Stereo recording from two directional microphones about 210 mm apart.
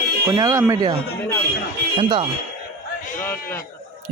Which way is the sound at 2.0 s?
25° right (ahead or behind).